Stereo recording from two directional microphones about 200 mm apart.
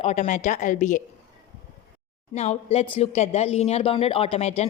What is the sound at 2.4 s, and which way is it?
A woman's voice, 30° left (ahead or behind).